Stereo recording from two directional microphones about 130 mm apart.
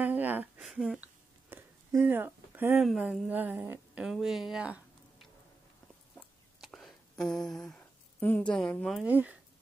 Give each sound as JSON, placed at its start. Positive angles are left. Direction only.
{"t": 0.0, "sound": "a sound", "side_deg": -15}
{"t": 0.6, "sound": "speech", "side_deg": -5}
{"t": 1.5, "sound": "a sound", "side_deg": -15}
{"t": 2.8, "sound": "a woman's voice", "side_deg": -5}
{"t": 4.0, "sound": "speech", "side_deg": -5}
{"t": 6.1, "sound": "whispering", "side_deg": 0}
{"t": 9.0, "sound": "a woman's voice", "side_deg": -10}